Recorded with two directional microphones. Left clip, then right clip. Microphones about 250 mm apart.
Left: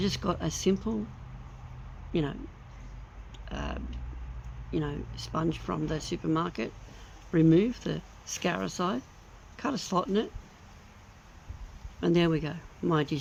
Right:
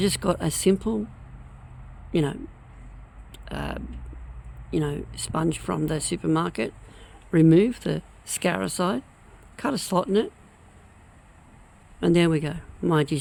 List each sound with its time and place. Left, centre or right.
0.0 s speech: right
2.1 s speech: right
11.9 s speech: right